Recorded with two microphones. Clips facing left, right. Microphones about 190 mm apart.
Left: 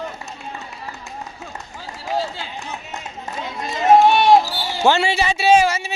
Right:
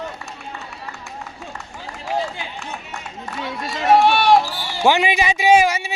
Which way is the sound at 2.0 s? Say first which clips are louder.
Even; 15° right (ahead or behind).